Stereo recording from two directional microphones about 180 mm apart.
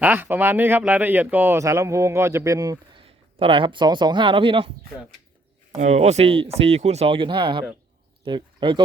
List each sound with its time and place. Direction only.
0.0 s speech: 10° right (ahead or behind); by 4.7 s 30° right (ahead or behind)
5.7 s speech: 40° right (ahead or behind); by 8.8 s 25° right (ahead or behind)